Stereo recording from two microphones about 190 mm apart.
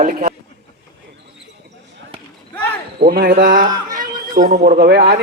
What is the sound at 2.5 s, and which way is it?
Basketball bounce, 10° left (ahead or behind).